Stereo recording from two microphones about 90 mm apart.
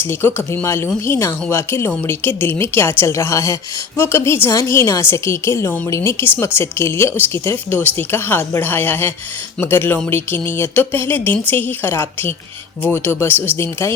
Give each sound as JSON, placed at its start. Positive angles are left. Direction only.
{"t": 0.0, "sound": "a woman's voice", "side_deg": 25}